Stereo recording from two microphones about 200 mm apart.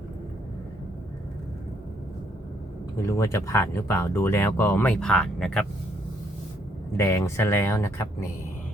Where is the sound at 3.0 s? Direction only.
15° left (ahead or behind).